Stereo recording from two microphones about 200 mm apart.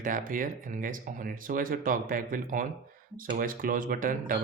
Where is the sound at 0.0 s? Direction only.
40° right (ahead or behind).